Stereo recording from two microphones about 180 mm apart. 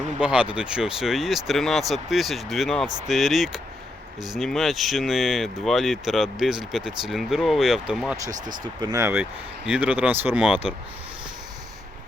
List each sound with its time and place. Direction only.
0.2 s speech: 5° right (ahead or behind)
8.4 s speech: 25° right (ahead or behind); by 10.7 s 5° right (ahead or behind)